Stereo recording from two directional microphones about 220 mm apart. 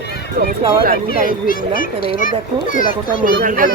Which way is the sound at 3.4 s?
35° right (ahead or behind).